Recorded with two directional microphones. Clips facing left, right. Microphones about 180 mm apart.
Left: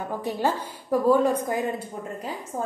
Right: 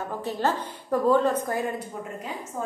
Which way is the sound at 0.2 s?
10° left (ahead or behind).